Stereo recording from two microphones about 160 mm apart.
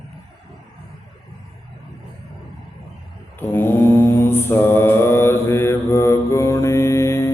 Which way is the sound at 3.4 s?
15° left (ahead or behind).